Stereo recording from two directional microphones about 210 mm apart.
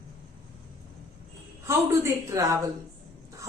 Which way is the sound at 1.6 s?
15° right (ahead or behind).